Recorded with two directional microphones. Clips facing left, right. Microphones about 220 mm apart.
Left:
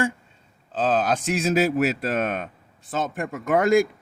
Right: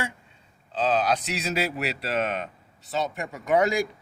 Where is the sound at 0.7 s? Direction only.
50° left (ahead or behind).